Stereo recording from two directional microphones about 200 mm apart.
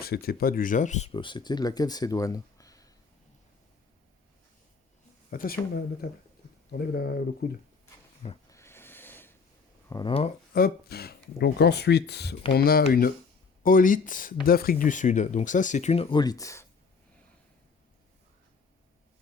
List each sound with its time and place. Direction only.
0.0 s speech: 50° left (ahead or behind); by 2.9 s 15° left (ahead or behind)
5.3 s speech: 45° left (ahead or behind)
8.4 s snort: 15° left (ahead or behind)
9.9 s speech: 25° left (ahead or behind)
10.5 s speech: 50° left (ahead or behind); by 16.6 s 15° left (ahead or behind)